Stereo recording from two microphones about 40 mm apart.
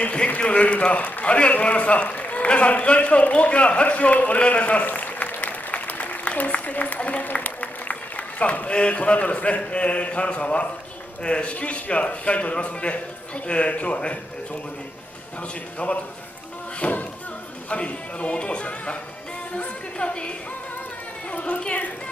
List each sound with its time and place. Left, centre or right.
0.0 s a man's voice: left
15.8 s a man's voice: left
21.5 s a man's voice: left